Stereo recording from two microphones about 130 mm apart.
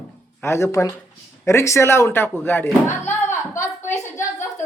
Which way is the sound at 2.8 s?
20° left (ahead or behind).